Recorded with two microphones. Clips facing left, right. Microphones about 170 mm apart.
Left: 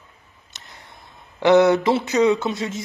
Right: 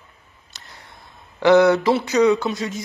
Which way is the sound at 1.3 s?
20° left (ahead or behind).